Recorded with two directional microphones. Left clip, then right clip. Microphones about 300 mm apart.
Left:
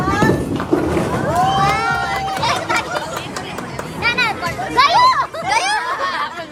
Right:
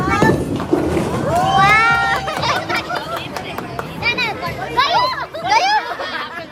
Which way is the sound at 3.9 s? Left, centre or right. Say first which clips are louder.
Left 2 dB; left.